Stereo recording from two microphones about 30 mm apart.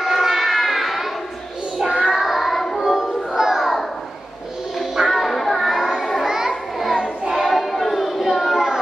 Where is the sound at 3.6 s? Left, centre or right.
Centre.